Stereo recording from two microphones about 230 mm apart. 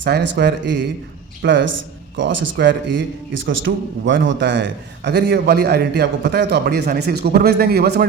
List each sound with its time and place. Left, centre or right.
0.0 s a man's voice: right